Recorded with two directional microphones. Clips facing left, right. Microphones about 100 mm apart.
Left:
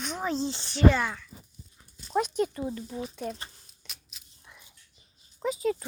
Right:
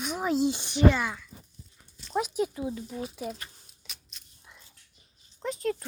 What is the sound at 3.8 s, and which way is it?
Biting, centre (ahead or behind).